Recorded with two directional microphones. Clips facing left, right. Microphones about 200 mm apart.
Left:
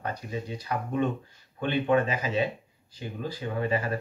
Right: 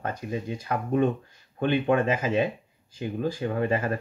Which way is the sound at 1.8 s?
50° right (ahead or behind).